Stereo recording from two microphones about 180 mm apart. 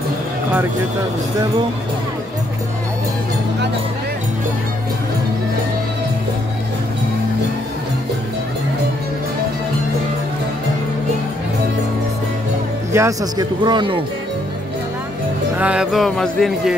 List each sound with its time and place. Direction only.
12.9 s speech: 20° right (ahead or behind)
15.5 s speech: 5° right (ahead or behind)